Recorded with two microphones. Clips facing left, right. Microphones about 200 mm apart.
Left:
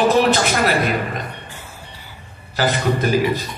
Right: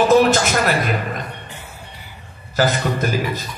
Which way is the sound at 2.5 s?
45° right (ahead or behind).